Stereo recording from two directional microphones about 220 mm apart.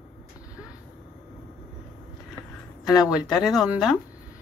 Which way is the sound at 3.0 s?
5° right (ahead or behind).